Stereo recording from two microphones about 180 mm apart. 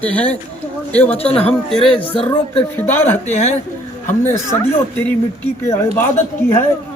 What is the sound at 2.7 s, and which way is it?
Speech, 10° left (ahead or behind).